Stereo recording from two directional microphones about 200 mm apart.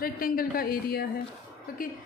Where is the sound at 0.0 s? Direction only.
45° left (ahead or behind).